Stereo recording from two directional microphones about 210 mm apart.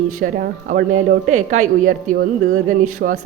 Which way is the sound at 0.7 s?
40° right (ahead or behind).